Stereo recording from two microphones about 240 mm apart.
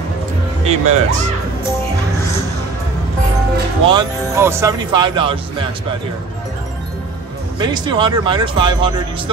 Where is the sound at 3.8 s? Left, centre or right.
Centre.